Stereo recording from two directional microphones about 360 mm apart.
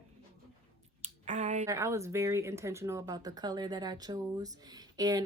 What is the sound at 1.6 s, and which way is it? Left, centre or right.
Speech, centre.